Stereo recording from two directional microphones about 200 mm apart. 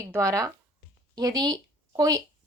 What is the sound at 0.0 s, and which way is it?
A woman's voice, 15° right (ahead or behind).